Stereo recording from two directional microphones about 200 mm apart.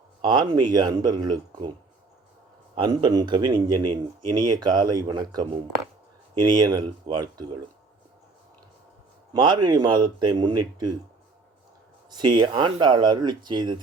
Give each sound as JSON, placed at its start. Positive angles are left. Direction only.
{"t": 0.2, "sound": "a man's voice", "side_deg": -20}
{"t": 2.7, "sound": "a man's voice", "side_deg": -20}
{"t": 9.3, "sound": "a man's voice", "side_deg": -20}
{"t": 12.1, "sound": "a man's voice", "side_deg": -20}